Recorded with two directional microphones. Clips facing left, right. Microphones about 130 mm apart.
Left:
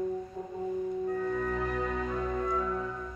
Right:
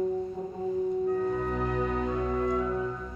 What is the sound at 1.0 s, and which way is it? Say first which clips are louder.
Music: right 3 dB; 25° right (ahead or behind).